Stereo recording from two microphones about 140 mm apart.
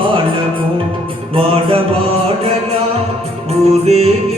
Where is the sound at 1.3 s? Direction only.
40° right (ahead or behind).